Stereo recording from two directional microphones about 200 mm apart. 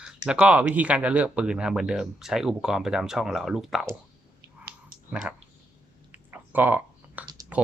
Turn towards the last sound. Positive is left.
turn(degrees=-15)  # may be behind; listen again after turning